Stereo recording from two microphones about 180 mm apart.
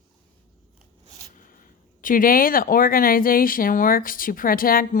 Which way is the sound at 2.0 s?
50° left (ahead or behind).